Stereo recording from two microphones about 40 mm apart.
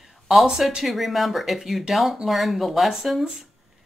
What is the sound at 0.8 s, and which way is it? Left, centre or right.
Speech, centre.